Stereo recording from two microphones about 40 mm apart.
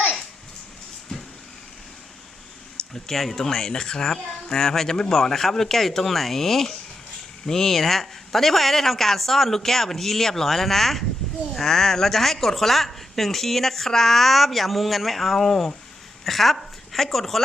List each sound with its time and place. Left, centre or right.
2.9 s a woman's voice: centre